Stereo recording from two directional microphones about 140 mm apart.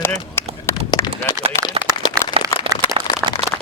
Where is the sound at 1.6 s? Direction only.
20° left (ahead or behind).